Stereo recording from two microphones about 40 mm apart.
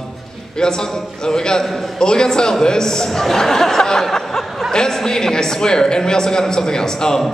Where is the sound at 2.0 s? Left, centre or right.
Centre.